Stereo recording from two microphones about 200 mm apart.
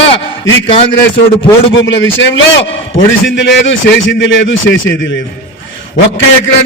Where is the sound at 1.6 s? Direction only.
70° left (ahead or behind).